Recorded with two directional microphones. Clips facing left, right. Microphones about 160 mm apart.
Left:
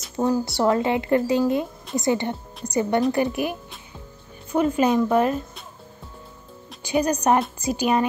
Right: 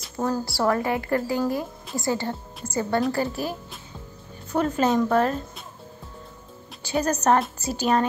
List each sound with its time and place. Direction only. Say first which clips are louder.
0.2 s a woman's voice: left 3 dB; 20° left (ahead or behind)
6.8 s a woman's voice: left 2 dB; 15° left (ahead or behind)